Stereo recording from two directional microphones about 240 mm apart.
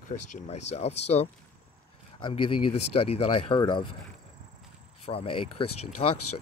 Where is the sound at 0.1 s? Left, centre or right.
Left.